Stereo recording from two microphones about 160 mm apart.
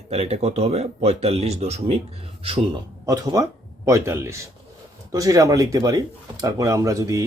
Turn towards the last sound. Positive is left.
turn(degrees=-20)  # may be behind; listen again after turning